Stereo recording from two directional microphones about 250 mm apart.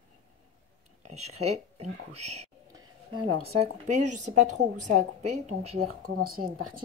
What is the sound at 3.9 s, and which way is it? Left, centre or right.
A woman's voice, right.